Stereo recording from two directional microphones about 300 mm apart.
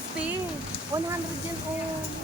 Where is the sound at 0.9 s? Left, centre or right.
Centre.